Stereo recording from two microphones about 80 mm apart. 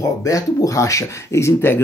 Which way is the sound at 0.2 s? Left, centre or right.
Left.